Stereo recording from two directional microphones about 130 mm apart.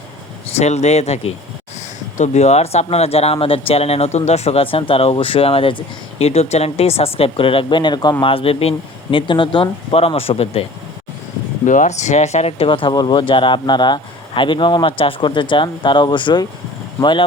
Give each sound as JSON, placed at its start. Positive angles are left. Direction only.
{"t": 0.5, "sound": "speech", "side_deg": 60}
{"t": 11.6, "sound": "speech", "side_deg": 75}